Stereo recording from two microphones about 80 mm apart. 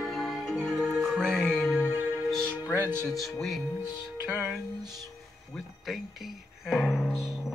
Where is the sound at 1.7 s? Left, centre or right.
Right.